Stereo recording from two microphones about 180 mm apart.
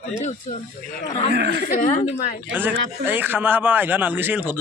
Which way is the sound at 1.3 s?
70° right (ahead or behind).